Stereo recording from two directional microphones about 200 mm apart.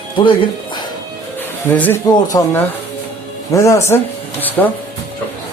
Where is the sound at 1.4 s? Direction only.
10° left (ahead or behind).